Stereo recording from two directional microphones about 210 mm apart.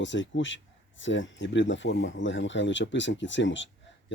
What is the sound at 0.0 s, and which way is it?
Speech, 60° left (ahead or behind).